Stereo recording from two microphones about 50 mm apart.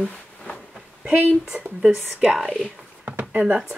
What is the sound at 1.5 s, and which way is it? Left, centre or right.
Speech, centre.